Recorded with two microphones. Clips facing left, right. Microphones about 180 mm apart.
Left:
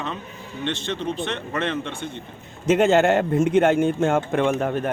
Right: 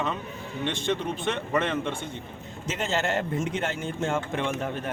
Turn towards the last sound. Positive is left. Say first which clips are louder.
# left 8 dB
turn(degrees=55)  # may be behind; listen again after turning